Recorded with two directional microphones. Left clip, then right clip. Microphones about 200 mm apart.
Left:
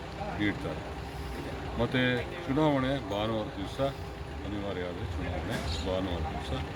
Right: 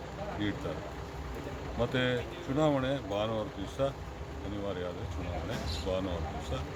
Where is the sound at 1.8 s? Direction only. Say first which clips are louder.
Left 2 dB; 15° right (ahead or behind).